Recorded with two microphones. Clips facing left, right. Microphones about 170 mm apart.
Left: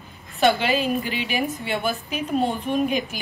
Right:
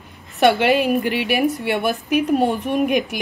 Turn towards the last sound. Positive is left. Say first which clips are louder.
# right 4 dB
turn(degrees=-70)  # may be behind; listen again after turning